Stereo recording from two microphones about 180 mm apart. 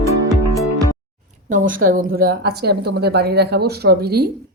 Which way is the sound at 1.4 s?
45° right (ahead or behind).